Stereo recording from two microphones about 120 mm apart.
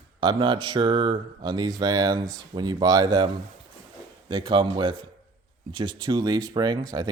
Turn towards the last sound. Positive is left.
turn(degrees=-35)  # may be behind; listen again after turning